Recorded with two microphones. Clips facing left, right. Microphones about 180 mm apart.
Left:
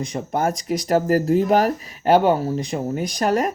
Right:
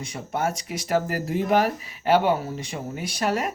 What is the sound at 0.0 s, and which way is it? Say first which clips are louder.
Speech: left 5 dB; 35° left (ahead or behind).